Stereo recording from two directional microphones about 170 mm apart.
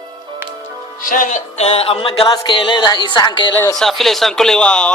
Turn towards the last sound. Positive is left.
turn(degrees=5)  # may be behind; listen again after turning